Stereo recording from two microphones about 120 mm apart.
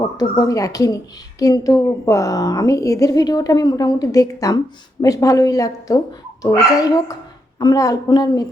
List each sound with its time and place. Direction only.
0.2 s a woman's voice: 30° left (ahead or behind)